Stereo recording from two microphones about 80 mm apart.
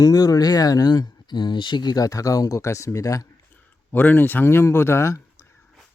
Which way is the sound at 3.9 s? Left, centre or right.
Left.